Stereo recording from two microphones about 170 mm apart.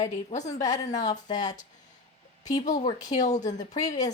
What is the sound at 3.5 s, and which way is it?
Speech, 20° left (ahead or behind).